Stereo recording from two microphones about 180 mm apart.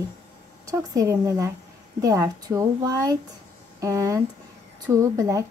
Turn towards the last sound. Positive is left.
turn(degrees=-20)  # may be behind; listen again after turning